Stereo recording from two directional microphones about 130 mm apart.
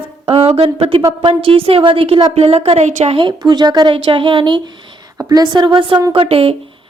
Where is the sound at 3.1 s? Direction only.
40° right (ahead or behind).